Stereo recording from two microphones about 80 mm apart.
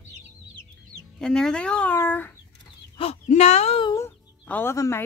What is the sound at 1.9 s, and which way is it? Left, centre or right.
Speech, left.